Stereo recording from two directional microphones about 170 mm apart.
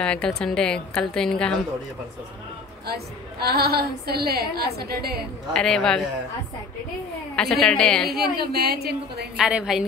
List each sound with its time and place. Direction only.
0.0 s a woman's voice: 5° left (ahead or behind)
2.9 s a woman's voice: 65° right (ahead or behind)
5.5 s a woman's voice: 5° left (ahead or behind)
7.3 s a woman's voice: 5° left (ahead or behind)
8.5 s a woman's voice: 70° right (ahead or behind)
9.4 s a woman's voice: 5° right (ahead or behind)